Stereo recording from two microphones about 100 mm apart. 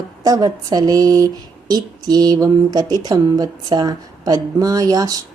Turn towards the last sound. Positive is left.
turn(degrees=-40)  # may be behind; listen again after turning